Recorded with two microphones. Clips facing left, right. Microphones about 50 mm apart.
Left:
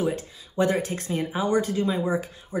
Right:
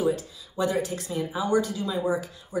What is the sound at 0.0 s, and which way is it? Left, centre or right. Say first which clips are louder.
Speech: right 1 dB; left.